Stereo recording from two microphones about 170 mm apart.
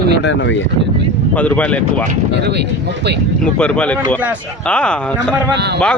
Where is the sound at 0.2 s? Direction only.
90° left.